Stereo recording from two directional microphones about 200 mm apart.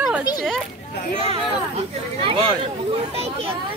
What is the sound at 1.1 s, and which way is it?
Speech, 25° right (ahead or behind).